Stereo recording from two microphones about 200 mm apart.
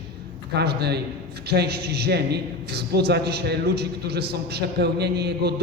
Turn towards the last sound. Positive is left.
turn(degrees=-55)  # may be behind; listen again after turning